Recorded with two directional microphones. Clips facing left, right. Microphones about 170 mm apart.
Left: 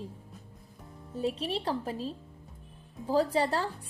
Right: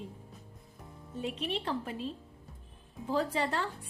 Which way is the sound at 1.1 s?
35° left (ahead or behind).